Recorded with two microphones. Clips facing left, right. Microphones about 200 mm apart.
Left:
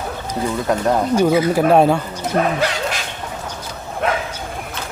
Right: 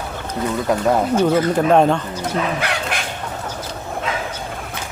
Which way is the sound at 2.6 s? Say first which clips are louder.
Left 2 dB; 60° right (ahead or behind).